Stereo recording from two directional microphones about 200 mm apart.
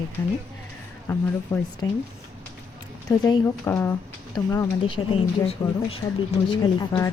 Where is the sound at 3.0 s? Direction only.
15° left (ahead or behind).